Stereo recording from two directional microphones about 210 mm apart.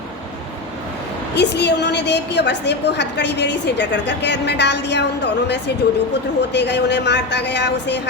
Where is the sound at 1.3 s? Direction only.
55° left (ahead or behind).